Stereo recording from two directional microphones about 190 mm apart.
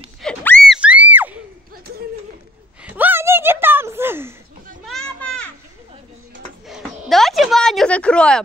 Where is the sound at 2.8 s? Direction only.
10° right (ahead or behind).